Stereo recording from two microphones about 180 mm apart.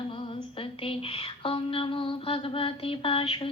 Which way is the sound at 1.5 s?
30° left (ahead or behind).